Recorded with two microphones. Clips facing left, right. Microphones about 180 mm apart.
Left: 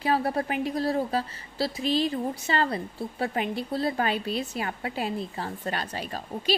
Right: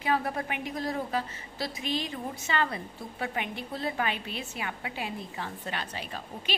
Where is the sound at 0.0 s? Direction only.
35° left (ahead or behind).